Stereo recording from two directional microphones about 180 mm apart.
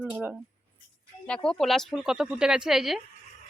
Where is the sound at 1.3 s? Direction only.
5° left (ahead or behind).